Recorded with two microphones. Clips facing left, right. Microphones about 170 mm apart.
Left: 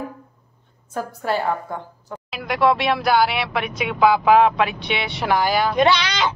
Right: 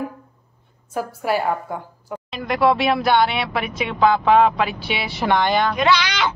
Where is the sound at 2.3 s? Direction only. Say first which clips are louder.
Right 1 dB; centre (ahead or behind).